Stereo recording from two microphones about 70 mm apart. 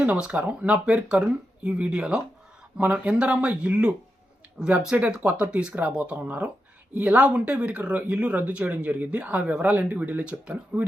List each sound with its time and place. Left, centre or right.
0.0 s speech: centre